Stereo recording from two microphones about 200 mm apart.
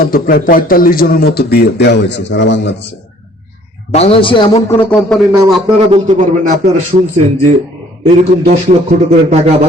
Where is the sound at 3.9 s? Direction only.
30° left (ahead or behind).